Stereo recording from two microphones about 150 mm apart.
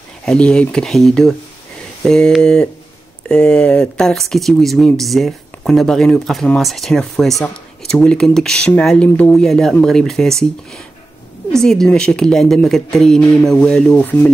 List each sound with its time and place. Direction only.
0.2 s speech: 5° left (ahead or behind)
11.5 s speech: 5° left (ahead or behind)